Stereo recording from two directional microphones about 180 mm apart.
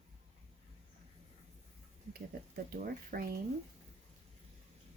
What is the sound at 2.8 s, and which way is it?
Speech, 55° right (ahead or behind).